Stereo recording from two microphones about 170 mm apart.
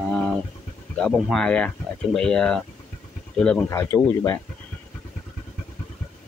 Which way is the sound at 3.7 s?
15° left (ahead or behind).